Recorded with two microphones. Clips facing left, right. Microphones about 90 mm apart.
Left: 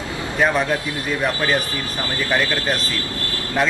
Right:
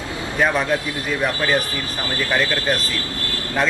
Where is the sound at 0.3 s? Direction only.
5° left (ahead or behind).